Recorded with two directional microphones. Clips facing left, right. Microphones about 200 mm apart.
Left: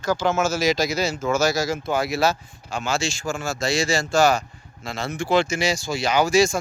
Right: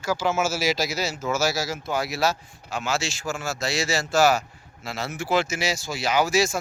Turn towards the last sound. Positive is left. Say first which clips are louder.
# left 3 dB
turn(degrees=-5)  # may be behind; listen again after turning